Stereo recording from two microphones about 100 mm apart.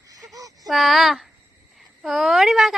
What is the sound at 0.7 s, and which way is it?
A woman's voice, centre (ahead or behind).